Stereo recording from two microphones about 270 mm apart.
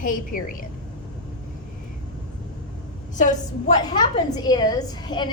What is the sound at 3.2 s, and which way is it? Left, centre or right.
Speech, left.